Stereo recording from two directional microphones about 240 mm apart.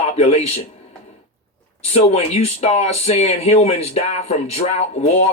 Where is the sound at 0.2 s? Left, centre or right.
Left.